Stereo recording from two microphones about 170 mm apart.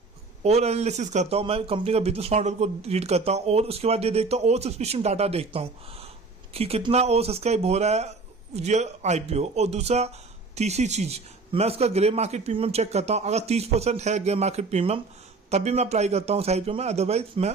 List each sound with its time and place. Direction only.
0.4 s speech: 40° right (ahead or behind)